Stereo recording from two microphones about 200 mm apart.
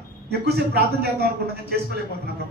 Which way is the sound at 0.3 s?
55° right (ahead or behind).